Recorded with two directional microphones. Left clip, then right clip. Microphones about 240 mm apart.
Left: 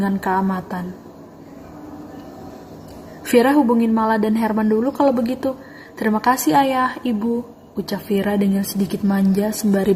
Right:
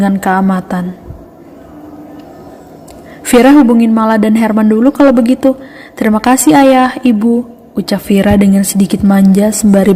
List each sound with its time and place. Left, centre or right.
0.0 s speech: right
3.4 s speech: right